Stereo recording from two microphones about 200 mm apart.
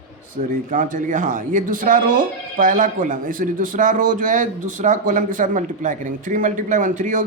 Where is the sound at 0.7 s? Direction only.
40° right (ahead or behind).